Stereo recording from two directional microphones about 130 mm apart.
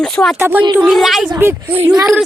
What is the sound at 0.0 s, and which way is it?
Speech, 5° left (ahead or behind).